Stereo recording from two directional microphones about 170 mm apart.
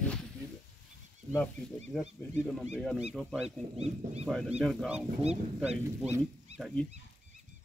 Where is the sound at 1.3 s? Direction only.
5° left (ahead or behind).